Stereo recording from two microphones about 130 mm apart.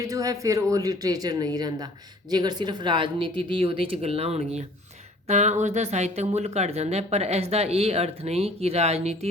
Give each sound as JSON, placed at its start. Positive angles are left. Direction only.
{"t": 0.0, "sound": "speech", "side_deg": -25}